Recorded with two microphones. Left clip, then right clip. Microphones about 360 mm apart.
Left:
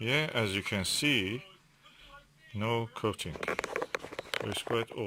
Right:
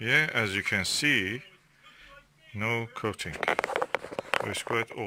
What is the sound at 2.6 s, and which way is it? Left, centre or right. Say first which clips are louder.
Speech: right 2 dB; centre.